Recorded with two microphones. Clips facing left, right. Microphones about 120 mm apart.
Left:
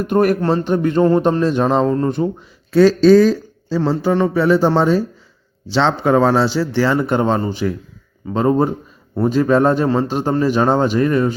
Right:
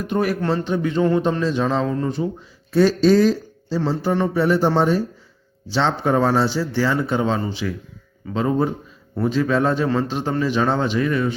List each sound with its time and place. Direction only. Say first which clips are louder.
0.0 s a man's voice: left 6 dB; 50° left (ahead or behind)
2.7 s a man's voice: left 5 dB; 90° left; by 11.3 s 40° left (ahead or behind)